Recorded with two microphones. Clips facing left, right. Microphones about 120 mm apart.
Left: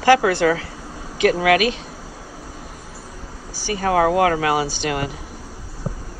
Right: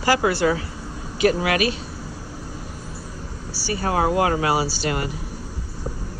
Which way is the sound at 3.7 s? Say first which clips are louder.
Left 4 dB; 35° right (ahead or behind).